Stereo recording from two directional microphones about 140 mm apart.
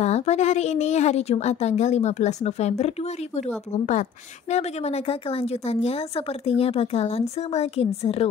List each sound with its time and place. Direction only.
0.0 s speech: 50° left (ahead or behind)
4.5 s speech: 50° left (ahead or behind)